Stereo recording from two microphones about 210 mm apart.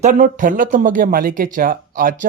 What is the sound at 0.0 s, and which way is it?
Speech, 40° right (ahead or behind).